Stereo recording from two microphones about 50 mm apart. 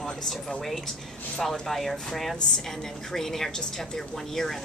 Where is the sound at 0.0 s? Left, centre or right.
Centre.